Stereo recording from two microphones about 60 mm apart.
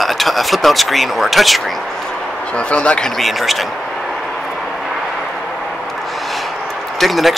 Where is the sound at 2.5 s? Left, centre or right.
Centre.